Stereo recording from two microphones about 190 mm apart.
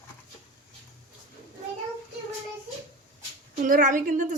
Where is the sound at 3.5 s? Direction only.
45° right (ahead or behind).